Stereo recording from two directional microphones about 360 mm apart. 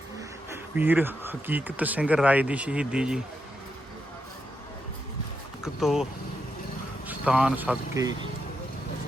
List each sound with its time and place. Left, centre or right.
0.2 s speech: centre
5.6 s a man's voice: centre
7.1 s a man's voice: centre